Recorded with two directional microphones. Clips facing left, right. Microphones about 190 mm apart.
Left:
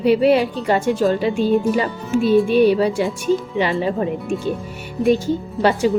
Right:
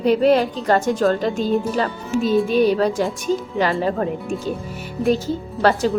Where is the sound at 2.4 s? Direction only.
40° right (ahead or behind).